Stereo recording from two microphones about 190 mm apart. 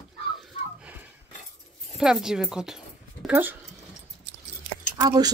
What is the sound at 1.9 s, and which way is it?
Speech, 5° right (ahead or behind).